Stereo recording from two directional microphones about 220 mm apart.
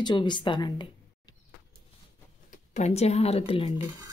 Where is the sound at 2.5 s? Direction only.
30° left (ahead or behind).